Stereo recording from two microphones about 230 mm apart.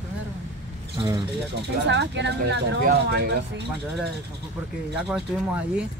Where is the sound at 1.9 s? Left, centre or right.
Right.